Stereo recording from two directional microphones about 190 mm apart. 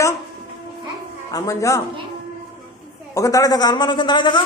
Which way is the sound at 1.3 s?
15° left (ahead or behind).